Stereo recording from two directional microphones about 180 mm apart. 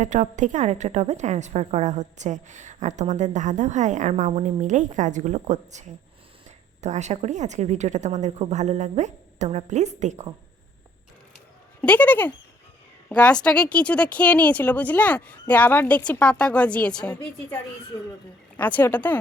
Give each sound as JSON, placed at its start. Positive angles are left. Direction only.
{"t": 0.0, "sound": "a woman's voice", "side_deg": -40}
{"t": 6.8, "sound": "a woman's voice", "side_deg": -40}
{"t": 11.8, "sound": "a woman's voice", "side_deg": 10}